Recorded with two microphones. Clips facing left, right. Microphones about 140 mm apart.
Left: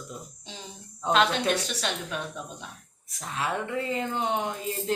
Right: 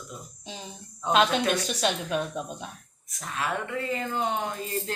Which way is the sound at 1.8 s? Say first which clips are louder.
Right 5 dB; 15° right (ahead or behind).